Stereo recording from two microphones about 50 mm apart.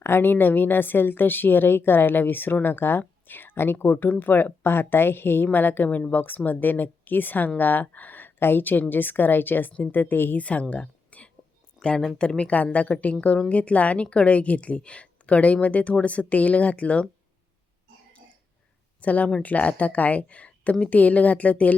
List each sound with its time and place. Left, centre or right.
0.0 s a woman's voice: left
3.2 s a sound: left
3.5 s a woman's voice: left
10.4 s speech: left
11.8 s a sound: centre
12.1 s a woman's voice: centre
18.9 s a woman's voice: left